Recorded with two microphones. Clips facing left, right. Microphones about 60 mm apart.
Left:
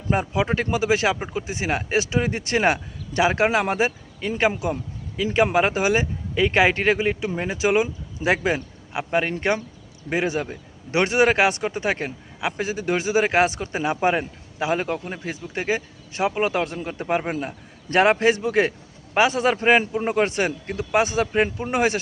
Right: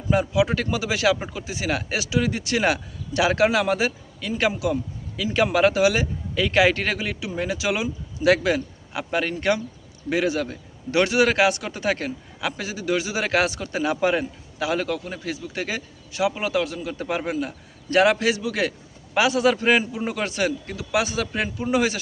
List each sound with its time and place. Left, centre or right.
0.1 s a man's voice: left